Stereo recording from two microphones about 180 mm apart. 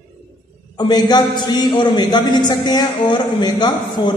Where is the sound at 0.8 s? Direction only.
20° left (ahead or behind).